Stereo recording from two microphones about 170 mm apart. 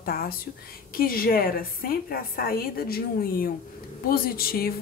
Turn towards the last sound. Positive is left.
turn(degrees=60)  # may be behind; listen again after turning